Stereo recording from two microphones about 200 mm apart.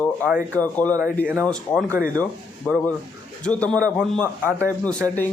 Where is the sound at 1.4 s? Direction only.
5° left (ahead or behind).